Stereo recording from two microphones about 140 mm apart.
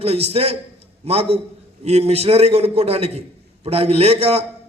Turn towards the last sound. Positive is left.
turn(degrees=-45)  # may be behind; listen again after turning